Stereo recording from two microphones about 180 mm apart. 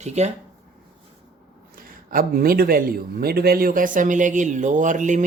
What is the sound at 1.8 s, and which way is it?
A man's voice, 50° right (ahead or behind).